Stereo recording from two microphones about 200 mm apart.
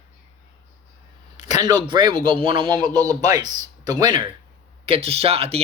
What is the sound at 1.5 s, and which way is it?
Speech, 20° right (ahead or behind).